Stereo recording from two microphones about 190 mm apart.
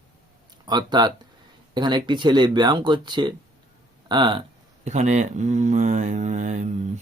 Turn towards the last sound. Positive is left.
turn(degrees=-40)  # may be behind; listen again after turning